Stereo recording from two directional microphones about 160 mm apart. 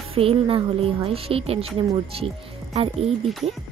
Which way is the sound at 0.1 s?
35° right (ahead or behind).